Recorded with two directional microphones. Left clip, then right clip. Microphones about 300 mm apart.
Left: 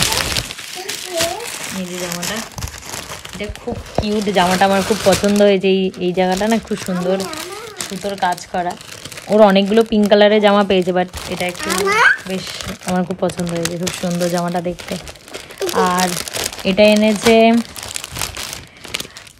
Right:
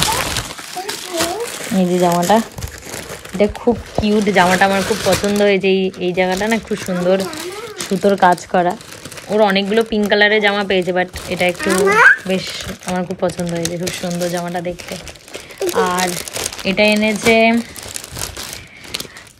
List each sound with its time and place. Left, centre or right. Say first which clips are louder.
0.0 s a sound: even; centre
2.0 s speech: right 11 dB; centre
3.7 s speech: right 5 dB; centre
5.7 s speech: even; left
5.9 s speech: even; centre
9.3 s speech: left 3 dB; centre
12.6 s speech: left 1 dB; centre